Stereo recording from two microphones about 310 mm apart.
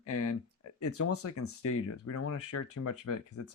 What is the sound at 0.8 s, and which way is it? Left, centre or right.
Speech, left.